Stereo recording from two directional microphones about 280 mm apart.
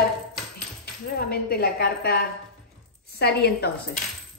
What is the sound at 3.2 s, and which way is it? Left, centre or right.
Speech, left.